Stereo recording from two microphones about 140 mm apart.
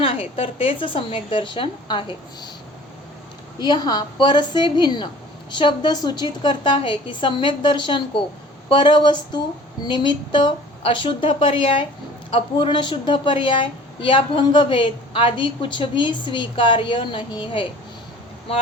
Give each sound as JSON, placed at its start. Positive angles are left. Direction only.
{"t": 0.0, "sound": "a woman's voice", "side_deg": 40}
{"t": 3.6, "sound": "a woman's voice", "side_deg": 30}